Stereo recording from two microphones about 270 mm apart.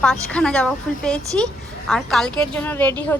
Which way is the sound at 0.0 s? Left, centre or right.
Centre.